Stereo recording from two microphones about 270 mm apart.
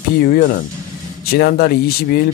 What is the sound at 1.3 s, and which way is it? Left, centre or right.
Speech, left.